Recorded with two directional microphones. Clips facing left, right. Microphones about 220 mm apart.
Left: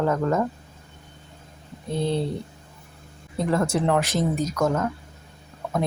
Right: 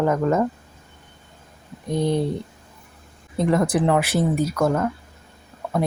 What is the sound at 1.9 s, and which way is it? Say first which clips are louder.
Speech: right 3 dB; 15° right (ahead or behind).